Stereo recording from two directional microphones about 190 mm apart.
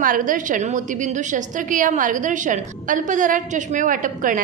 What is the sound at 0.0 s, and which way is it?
A woman's voice, 45° right (ahead or behind).